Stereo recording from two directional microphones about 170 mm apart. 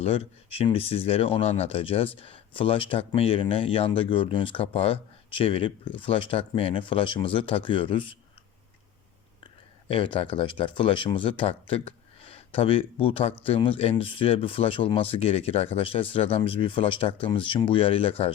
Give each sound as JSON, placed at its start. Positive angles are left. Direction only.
{"t": 0.0, "sound": "speech", "side_deg": 35}
{"t": 9.9, "sound": "speech", "side_deg": 30}